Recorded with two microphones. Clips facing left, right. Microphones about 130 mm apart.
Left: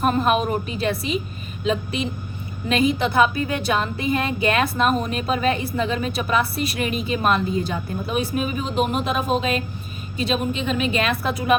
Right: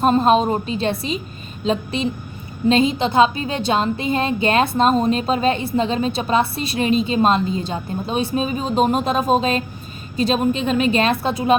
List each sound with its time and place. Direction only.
0.0 s a woman's voice: 25° right (ahead or behind)
11.2 s a woman's voice: 25° right (ahead or behind)